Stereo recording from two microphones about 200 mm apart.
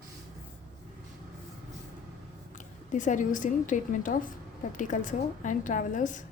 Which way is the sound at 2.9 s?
40° left (ahead or behind).